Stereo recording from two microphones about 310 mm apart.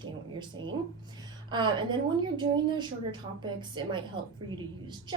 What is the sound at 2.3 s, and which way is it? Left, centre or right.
A woman's voice, centre.